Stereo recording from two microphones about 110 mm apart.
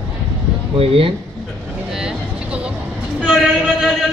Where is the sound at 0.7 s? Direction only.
55° right (ahead or behind).